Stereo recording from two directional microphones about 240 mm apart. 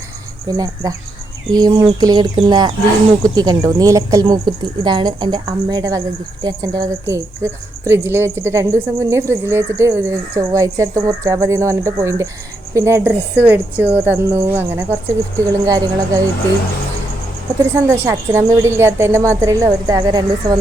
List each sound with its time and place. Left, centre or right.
0.4 s a woman's voice: centre
17.7 s a woman's voice: centre